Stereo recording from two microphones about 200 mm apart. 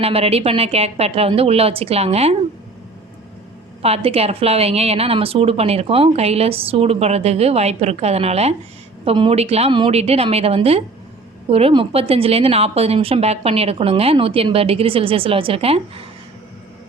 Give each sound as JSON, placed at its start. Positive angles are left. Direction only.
{"t": 0.0, "sound": "a woman's voice", "side_deg": -30}
{"t": 3.8, "sound": "a woman's voice", "side_deg": -30}